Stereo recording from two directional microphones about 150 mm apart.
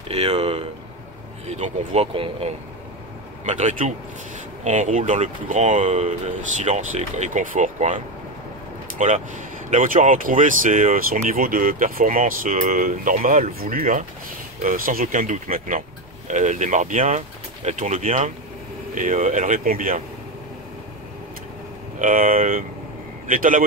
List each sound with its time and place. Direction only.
0.1 s speech: 40° right (ahead or behind)
2.1 s speech: 35° right (ahead or behind)
3.4 s speech: 55° right (ahead or behind)
11.2 s speech: 70° right (ahead or behind)
21.9 s a man's voice: 60° right (ahead or behind)